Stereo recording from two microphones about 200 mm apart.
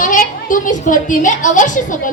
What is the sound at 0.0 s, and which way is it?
A woman's voice, 40° left (ahead or behind).